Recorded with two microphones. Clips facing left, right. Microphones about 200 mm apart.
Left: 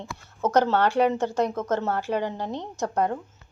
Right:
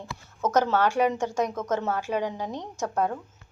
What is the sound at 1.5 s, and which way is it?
Speech, 10° left (ahead or behind).